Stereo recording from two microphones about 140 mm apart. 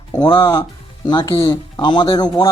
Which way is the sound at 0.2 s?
30° left (ahead or behind).